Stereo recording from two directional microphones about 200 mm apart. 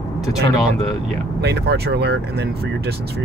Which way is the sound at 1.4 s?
55° right (ahead or behind).